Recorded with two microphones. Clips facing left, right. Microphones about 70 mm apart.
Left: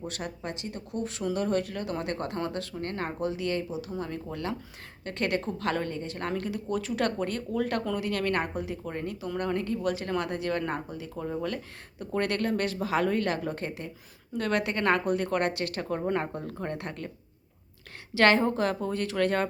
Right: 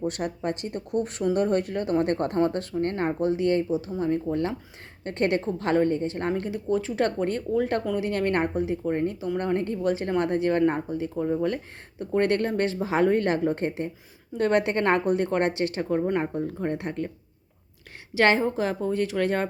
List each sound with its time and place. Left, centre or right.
0.1 s a woman's voice: right
11.1 s a woman's voice: centre
11.4 s a woman's voice: right
13.7 s a woman's voice: right; by 17.1 s centre
18.1 s a woman's voice: centre